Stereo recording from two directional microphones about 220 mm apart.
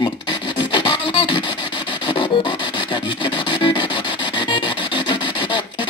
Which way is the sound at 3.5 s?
20° left (ahead or behind).